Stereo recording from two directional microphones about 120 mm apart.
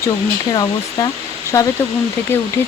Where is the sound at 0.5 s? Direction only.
35° left (ahead or behind).